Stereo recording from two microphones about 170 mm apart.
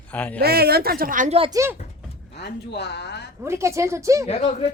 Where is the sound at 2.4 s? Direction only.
80° left.